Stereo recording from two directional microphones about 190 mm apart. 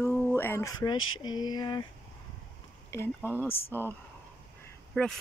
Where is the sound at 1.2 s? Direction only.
20° left (ahead or behind).